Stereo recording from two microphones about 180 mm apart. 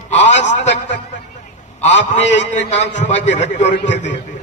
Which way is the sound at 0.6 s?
80° left.